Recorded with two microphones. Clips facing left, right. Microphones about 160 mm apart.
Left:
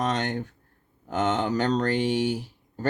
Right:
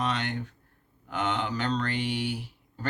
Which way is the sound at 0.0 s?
45° left (ahead or behind).